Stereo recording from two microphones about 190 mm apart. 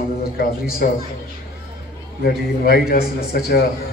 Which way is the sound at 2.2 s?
50° left (ahead or behind).